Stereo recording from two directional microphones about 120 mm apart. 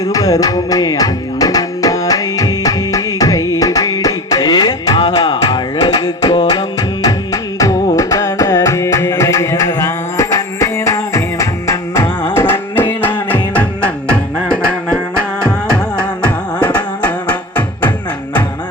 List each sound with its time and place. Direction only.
0.0 s music: 30° left (ahead or behind)
7.6 s carnatic music: 25° left (ahead or behind)
12.3 s music: 20° left (ahead or behind)
16.6 s a sound: 15° left (ahead or behind)